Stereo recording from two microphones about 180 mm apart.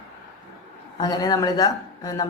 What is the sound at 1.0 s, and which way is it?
A woman's voice, 20° left (ahead or behind).